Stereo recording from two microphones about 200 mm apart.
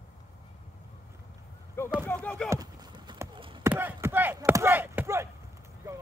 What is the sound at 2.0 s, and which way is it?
Music, 5° left (ahead or behind).